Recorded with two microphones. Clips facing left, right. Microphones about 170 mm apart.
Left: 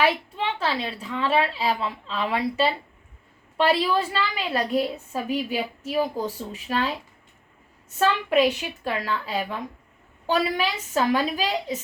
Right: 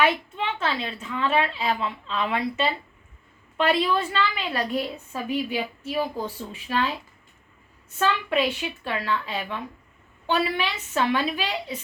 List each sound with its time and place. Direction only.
0.0 s a woman's voice: 35° left (ahead or behind)
8.8 s a woman's voice: 40° left (ahead or behind)